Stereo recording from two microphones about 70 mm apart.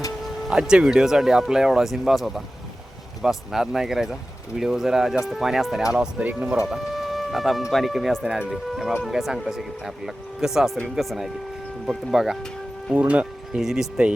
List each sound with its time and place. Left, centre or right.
0.7 s speech: centre
6.7 s music: centre
7.7 s speech: centre
12.9 s speech: centre
13.6 s speech: centre